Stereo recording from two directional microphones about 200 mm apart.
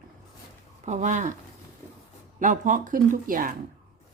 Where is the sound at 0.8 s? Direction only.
35° right (ahead or behind).